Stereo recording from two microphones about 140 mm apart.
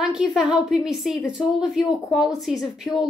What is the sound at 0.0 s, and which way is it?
Speech, 5° right (ahead or behind).